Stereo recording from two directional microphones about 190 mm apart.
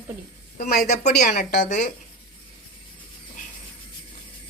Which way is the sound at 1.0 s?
40° left (ahead or behind).